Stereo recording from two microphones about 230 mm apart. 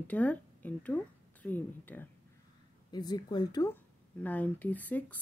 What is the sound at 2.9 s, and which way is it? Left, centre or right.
Speech, centre.